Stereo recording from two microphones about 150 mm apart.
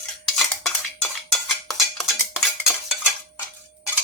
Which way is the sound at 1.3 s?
Centre (ahead or behind).